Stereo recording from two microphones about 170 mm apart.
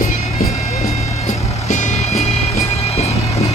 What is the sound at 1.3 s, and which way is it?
Vehicle, 45° left (ahead or behind).